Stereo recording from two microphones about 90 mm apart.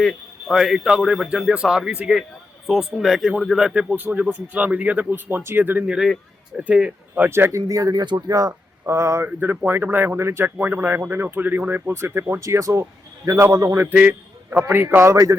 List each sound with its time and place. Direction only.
0.0 s speech: centre (ahead or behind)
3.8 s speech: 20° right (ahead or behind)
5.8 s a man's voice: 10° right (ahead or behind)
7.3 s speech: 30° right (ahead or behind)
8.8 s speech: 30° right (ahead or behind)
13.7 s a man's voice: 20° right (ahead or behind)